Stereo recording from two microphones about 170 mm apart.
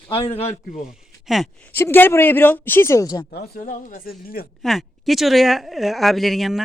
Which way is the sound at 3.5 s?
50° left (ahead or behind).